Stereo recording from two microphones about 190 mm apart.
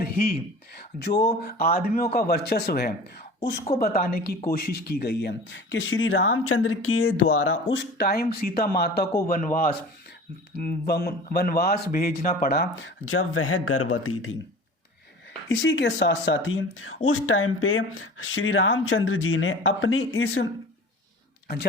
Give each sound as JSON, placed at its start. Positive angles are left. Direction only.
{"t": 0.0, "sound": "speech", "side_deg": 55}
{"t": 2.1, "sound": "speech", "side_deg": 55}
{"t": 9.2, "sound": "a man's voice", "side_deg": 45}
{"t": 10.6, "sound": "a man's voice", "side_deg": 55}
{"t": 12.7, "sound": "speech", "side_deg": 85}
{"t": 15.4, "sound": "speech", "side_deg": 75}
{"t": 21.4, "sound": "speech", "side_deg": 55}